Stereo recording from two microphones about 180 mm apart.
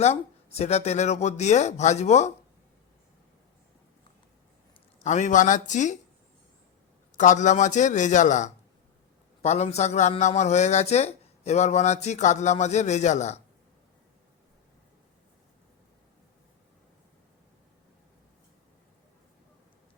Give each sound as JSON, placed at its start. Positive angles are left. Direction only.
{"t": 0.0, "sound": "speech", "side_deg": 35}
{"t": 5.0, "sound": "a man's voice", "side_deg": 40}
{"t": 7.2, "sound": "a man's voice", "side_deg": 45}